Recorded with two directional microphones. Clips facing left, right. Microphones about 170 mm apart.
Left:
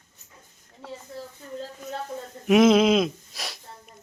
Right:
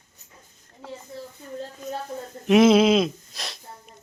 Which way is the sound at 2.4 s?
Centre (ahead or behind).